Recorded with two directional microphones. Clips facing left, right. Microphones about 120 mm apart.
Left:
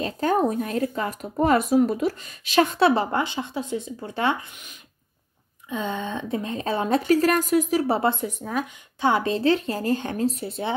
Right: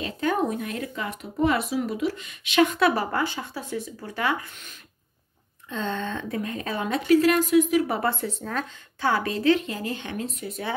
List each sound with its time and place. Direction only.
0.0 s speech: 35° left (ahead or behind)
5.7 s a woman's voice: 10° left (ahead or behind)
9.1 s speech: 25° left (ahead or behind)